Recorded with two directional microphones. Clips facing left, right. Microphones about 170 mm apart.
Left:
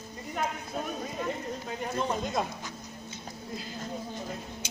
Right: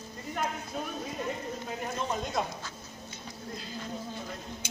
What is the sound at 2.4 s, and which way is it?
Speech, centre (ahead or behind).